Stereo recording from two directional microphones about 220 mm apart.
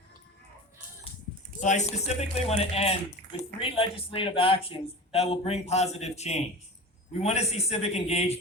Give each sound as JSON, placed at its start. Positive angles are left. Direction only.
{"t": 1.6, "sound": "speech", "side_deg": 30}